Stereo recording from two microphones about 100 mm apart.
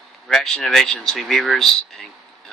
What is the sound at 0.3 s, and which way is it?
Speech, 5° left (ahead or behind).